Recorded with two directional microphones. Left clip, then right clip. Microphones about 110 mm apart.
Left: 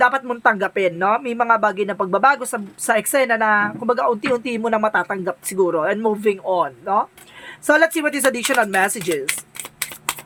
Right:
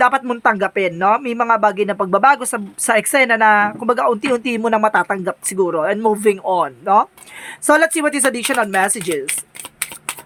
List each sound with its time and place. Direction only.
0.0 s speech: 40° right (ahead or behind); by 9.2 s 20° right (ahead or behind)